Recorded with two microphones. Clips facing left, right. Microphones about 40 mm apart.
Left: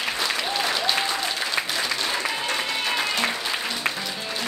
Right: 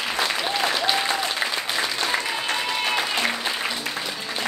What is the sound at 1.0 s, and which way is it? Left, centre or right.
Applause, right.